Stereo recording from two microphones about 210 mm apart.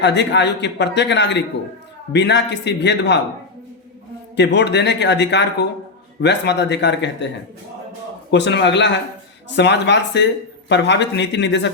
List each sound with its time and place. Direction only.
0.0 s a man's voice: 55° left (ahead or behind)
4.4 s a man's voice: 55° left (ahead or behind)
8.3 s a man's voice: 55° left (ahead or behind)